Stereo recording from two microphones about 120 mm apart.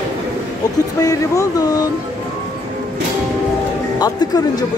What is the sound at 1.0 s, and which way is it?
Speech, 30° left (ahead or behind).